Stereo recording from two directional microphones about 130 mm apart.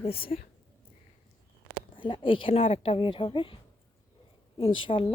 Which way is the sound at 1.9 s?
40° left (ahead or behind).